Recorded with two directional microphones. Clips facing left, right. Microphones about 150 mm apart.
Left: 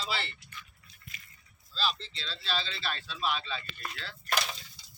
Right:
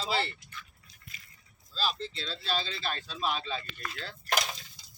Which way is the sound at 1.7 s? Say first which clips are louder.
Right 1 dB; 45° right (ahead or behind).